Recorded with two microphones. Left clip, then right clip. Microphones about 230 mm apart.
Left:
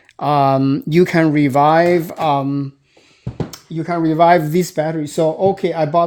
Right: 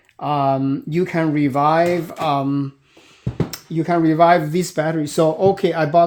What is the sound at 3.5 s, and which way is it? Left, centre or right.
Speech, centre.